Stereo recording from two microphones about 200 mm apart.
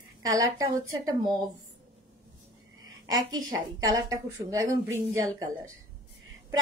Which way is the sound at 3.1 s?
20° right (ahead or behind).